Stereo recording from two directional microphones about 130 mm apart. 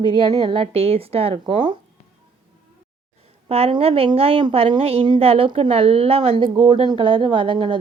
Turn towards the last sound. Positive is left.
turn(degrees=-40)  # may be behind; listen again after turning